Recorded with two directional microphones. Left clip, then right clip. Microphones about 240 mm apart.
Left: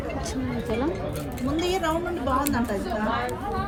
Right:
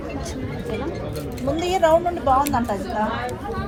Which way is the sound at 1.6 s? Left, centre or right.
Right.